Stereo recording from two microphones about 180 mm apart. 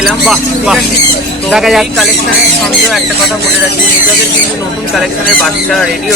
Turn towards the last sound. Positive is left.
turn(degrees=5)  # may be behind; listen again after turning